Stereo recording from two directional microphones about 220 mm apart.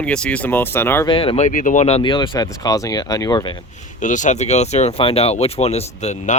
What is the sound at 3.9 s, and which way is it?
Speech, 35° left (ahead or behind).